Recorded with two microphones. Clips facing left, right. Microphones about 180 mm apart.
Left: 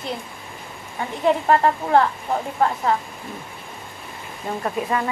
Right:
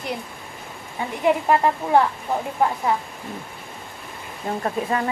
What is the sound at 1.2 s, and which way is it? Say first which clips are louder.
Speech: left 1 dB; 10° right (ahead or behind).